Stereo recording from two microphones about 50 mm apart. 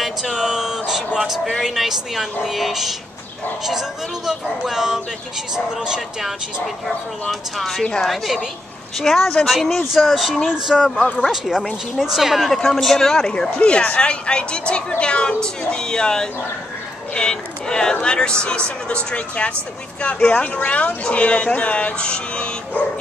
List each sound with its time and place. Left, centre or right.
0.0 s a sound: centre
1.6 s a woman's voice: centre
4.3 s a woman's voice: centre
12.7 s speech: centre
13.3 s a woman's voice: left